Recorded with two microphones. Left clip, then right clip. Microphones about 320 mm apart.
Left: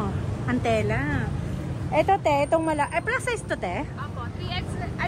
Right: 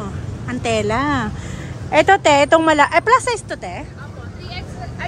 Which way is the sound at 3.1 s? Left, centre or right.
Centre.